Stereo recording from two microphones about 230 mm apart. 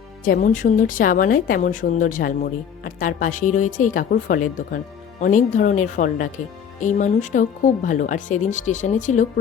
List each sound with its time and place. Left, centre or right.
0.3 s a woman's voice: left